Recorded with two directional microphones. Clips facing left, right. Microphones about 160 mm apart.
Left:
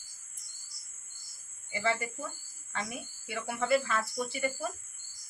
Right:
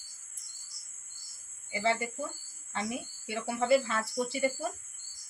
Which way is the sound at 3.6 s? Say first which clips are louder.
Right 2 dB; 30° right (ahead or behind).